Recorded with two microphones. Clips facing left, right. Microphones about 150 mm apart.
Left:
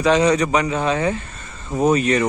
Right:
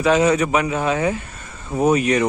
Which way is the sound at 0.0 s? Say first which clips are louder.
Even; 5° right (ahead or behind).